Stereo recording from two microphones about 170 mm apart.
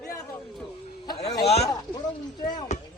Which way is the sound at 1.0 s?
25° left (ahead or behind).